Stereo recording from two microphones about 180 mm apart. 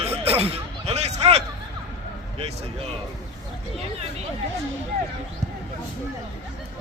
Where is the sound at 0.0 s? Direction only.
35° right (ahead or behind).